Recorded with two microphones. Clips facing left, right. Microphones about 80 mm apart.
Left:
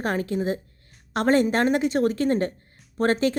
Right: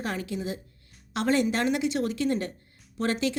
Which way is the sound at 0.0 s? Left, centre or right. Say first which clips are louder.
Left 6 dB; left.